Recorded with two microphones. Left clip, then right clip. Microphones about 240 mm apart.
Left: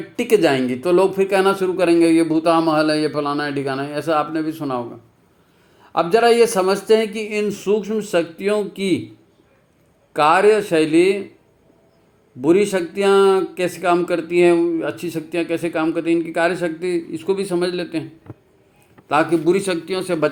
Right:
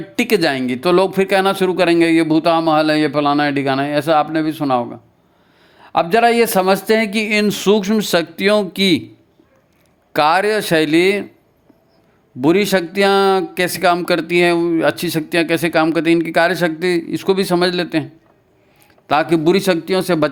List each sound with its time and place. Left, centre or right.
0.2 s a man's voice: right
10.1 s speech: right
12.4 s speech: right
19.0 s speech: right